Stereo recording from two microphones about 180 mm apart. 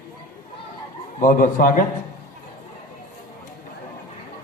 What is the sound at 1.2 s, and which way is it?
Speech, 50° left (ahead or behind).